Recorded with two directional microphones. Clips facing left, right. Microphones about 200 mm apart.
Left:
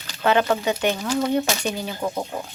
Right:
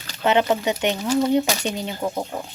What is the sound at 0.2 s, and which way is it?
Speech, 20° right (ahead or behind).